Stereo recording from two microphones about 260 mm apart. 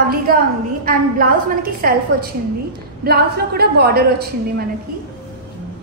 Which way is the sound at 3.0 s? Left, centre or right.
Right.